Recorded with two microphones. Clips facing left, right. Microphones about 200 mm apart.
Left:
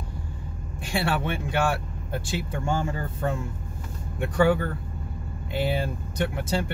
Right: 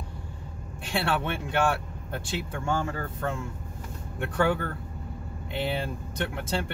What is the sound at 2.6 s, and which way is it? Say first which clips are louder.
Speech: even; 15° left (ahead or behind).